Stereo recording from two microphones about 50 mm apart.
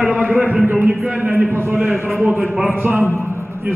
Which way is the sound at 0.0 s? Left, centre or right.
Right.